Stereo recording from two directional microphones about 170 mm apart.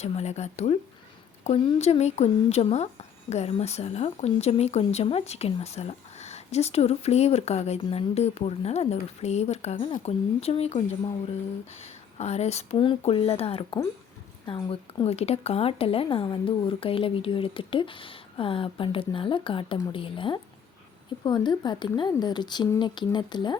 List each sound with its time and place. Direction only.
0.0 s speech: 40° left (ahead or behind)